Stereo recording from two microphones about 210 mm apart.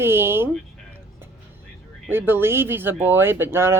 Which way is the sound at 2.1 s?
10° right (ahead or behind).